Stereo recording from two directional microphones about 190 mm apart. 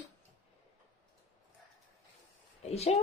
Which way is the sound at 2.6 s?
35° left (ahead or behind).